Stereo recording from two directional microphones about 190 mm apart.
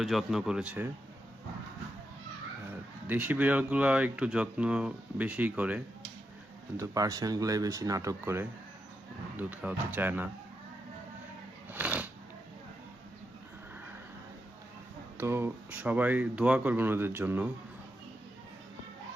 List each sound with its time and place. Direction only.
0.0 s speech: centre (ahead or behind)
3.1 s speech: 10° right (ahead or behind)
11.7 s shuffling cards: 10° right (ahead or behind)
15.2 s speech: 10° right (ahead or behind)